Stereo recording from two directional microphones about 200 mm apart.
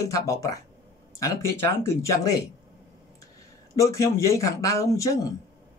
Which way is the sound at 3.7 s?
15° left (ahead or behind).